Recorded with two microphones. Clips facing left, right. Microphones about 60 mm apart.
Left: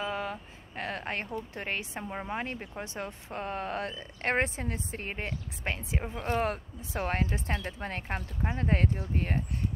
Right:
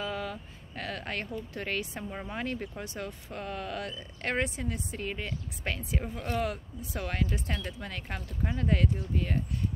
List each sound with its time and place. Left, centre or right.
0.0 s speech: left
5.7 s speech: left